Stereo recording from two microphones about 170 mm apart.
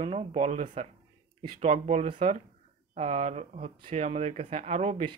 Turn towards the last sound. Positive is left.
turn(degrees=-45)  # may be behind; listen again after turning